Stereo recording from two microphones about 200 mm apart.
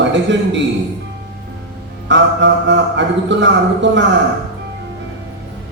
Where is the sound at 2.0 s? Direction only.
65° right (ahead or behind).